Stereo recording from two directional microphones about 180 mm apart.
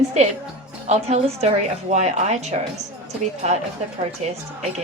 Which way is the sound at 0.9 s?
35° right (ahead or behind).